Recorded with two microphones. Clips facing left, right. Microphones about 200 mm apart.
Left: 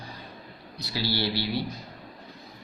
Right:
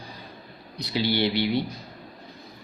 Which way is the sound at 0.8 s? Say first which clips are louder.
Right 5 dB; 20° right (ahead or behind).